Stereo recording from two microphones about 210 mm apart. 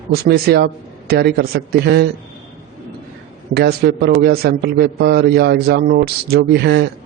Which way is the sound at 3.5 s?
50° right (ahead or behind).